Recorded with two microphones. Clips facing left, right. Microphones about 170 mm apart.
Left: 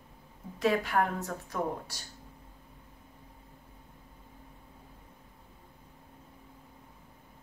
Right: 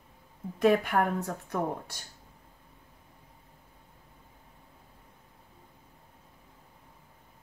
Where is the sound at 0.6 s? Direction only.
55° right (ahead or behind).